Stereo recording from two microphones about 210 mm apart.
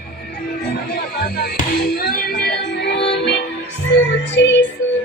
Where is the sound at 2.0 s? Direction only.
45° left (ahead or behind).